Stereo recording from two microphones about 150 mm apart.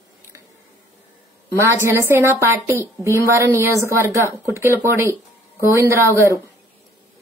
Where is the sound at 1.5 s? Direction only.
20° right (ahead or behind).